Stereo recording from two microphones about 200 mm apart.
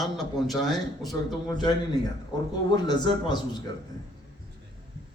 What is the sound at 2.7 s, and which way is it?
Speech, 20° left (ahead or behind).